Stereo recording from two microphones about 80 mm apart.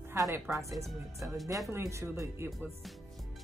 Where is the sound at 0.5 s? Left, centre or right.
Right.